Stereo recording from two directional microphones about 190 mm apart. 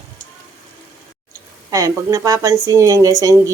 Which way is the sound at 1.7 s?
15° right (ahead or behind).